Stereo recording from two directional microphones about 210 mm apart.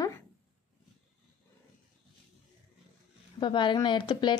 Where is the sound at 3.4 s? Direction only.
20° left (ahead or behind).